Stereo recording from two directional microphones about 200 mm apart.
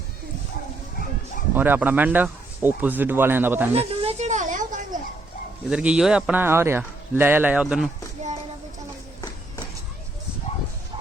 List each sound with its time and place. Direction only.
1.5 s a man's voice: 10° right (ahead or behind)
3.8 s a sound: 30° right (ahead or behind)
5.6 s a man's voice: 5° right (ahead or behind)